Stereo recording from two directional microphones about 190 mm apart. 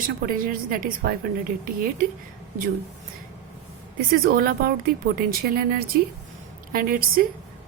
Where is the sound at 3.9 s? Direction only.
50° right (ahead or behind).